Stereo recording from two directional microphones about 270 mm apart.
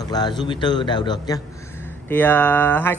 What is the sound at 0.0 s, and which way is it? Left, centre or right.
Speech, centre.